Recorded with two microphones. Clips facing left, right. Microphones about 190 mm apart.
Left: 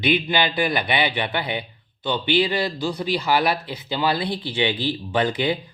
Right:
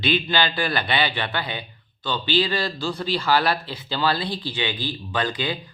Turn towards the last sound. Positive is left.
turn(degrees=25)  # may be behind; listen again after turning